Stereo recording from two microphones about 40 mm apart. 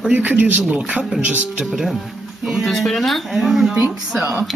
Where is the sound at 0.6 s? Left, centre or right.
Right.